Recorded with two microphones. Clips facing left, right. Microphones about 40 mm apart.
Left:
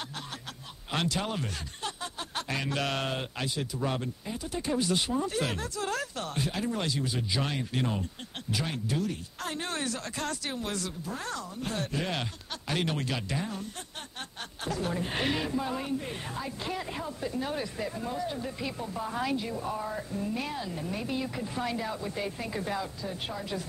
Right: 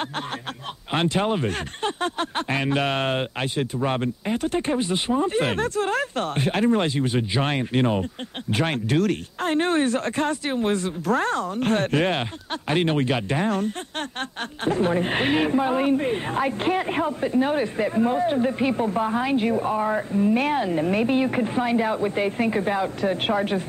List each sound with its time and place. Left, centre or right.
0.9 s a woman's voice: right
2.5 s a woman's voice: right
4.3 s speech: right
4.8 s a woman's voice: right
11.2 s speech: right
12.2 s a woman's voice: right
13.4 s speech: right
14.6 s a woman's voice: right
23.0 s speech: right